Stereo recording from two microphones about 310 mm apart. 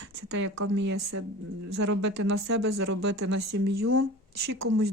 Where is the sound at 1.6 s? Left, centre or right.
Right.